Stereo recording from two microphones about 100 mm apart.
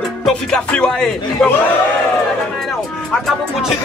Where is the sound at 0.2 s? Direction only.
5° left (ahead or behind).